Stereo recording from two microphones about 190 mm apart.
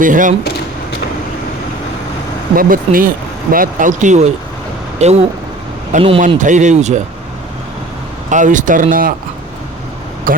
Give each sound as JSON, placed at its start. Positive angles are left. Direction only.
{"t": 0.0, "sound": "speech", "side_deg": -45}
{"t": 2.6, "sound": "speech", "side_deg": -45}
{"t": 8.3, "sound": "speech", "side_deg": -40}
{"t": 10.3, "sound": "speech", "side_deg": -45}